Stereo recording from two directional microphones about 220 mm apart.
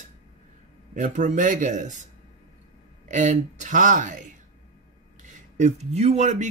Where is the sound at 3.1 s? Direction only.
35° right (ahead or behind).